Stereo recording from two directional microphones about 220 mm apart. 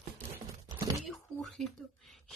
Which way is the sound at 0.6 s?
15° right (ahead or behind).